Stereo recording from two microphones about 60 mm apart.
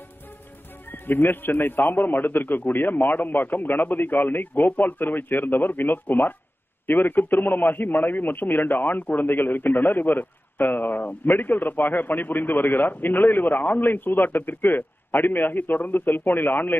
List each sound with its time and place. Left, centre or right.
0.8 s a man's voice: left